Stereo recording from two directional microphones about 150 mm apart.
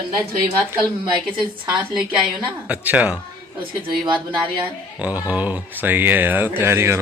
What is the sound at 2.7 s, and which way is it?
Speech, 10° right (ahead or behind).